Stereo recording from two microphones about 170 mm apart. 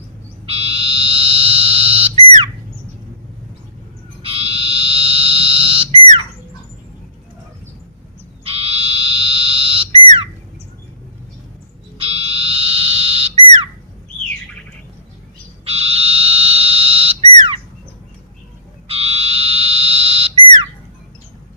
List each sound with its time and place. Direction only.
0.4 s frog: 35° right (ahead or behind)
4.2 s frog: 35° right (ahead or behind)
8.4 s frog: 35° right (ahead or behind)
11.9 s fire alarm: 35° right (ahead or behind)
13.4 s squawk: 30° right (ahead or behind)
15.6 s frog: 35° right (ahead or behind)
18.9 s fire alarm: 35° right (ahead or behind)